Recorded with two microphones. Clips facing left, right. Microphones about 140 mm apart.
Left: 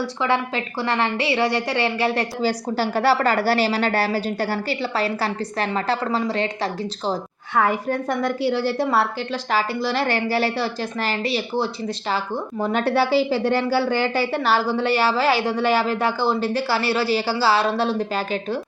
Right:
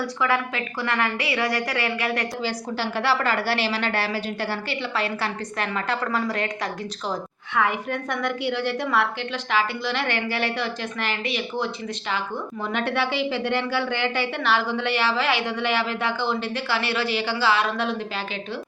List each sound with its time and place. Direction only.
0.2 s a woman's voice: 30° left (ahead or behind)
7.1 s a woman's voice: 40° left (ahead or behind)